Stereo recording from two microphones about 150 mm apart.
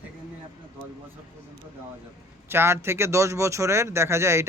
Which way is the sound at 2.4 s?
15° right (ahead or behind).